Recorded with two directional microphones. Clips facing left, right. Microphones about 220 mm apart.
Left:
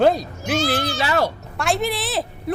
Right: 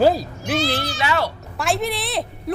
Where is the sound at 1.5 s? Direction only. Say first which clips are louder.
Right 1 dB; centre (ahead or behind).